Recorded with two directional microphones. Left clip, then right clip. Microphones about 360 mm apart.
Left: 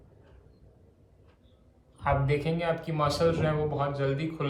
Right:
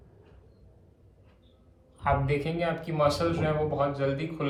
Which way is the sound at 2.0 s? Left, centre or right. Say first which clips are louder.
Right 1 dB; centre.